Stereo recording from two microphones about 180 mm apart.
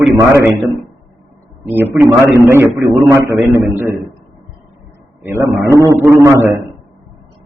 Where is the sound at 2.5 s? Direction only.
15° right (ahead or behind).